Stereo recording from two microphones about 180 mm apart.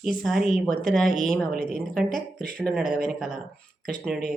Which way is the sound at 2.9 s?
55° right (ahead or behind).